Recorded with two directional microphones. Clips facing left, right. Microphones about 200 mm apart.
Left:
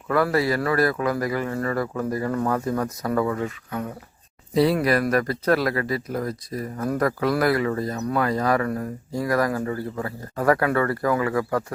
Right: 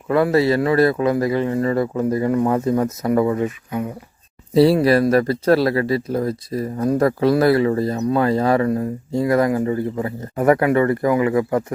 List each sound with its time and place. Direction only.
0.1 s speech: 25° right (ahead or behind)
4.5 s speech: 30° right (ahead or behind)